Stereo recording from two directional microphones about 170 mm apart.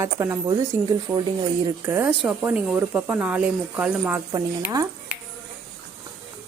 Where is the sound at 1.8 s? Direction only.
15° right (ahead or behind).